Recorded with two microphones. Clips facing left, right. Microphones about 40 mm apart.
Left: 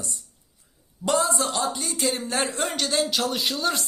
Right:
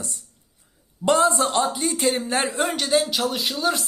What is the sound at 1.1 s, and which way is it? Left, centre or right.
Speech, right.